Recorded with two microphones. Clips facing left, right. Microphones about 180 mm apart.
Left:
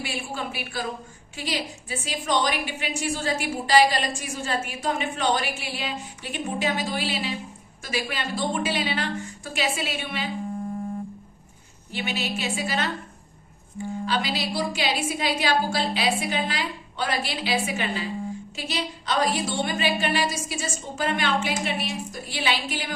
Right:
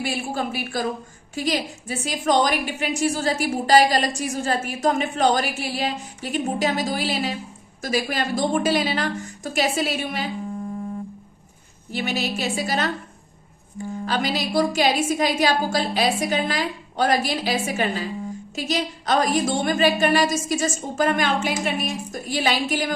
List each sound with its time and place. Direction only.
0.0 s a woman's voice: 40° right (ahead or behind)
11.9 s a woman's voice: 40° right (ahead or behind)
14.0 s a woman's voice: 45° right (ahead or behind)